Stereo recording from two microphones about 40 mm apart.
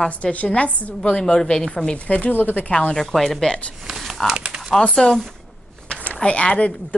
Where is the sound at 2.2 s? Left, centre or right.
Left.